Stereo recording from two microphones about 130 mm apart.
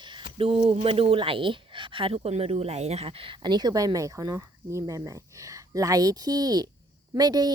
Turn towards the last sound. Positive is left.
turn(degrees=-30)  # may be behind; listen again after turning